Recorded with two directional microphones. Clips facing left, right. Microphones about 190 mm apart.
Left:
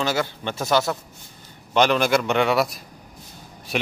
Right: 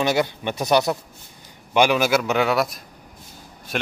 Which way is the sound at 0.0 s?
15° right (ahead or behind).